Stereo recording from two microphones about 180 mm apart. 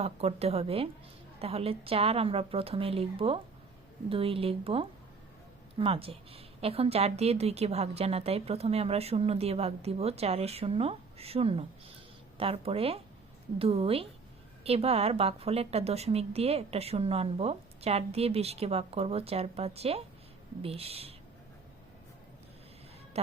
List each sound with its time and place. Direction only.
0.0 s a woman's voice: 35° right (ahead or behind)
23.1 s music: 35° right (ahead or behind)